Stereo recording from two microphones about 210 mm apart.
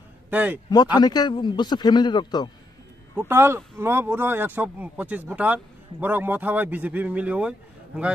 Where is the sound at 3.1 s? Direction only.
10° right (ahead or behind).